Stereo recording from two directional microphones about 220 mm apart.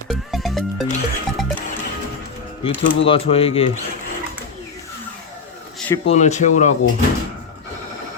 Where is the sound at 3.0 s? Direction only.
25° left (ahead or behind).